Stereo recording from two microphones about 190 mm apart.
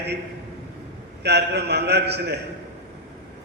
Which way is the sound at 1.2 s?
60° right (ahead or behind).